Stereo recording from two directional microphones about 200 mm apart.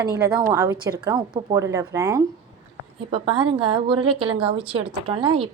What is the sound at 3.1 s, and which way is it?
Speech, 25° right (ahead or behind).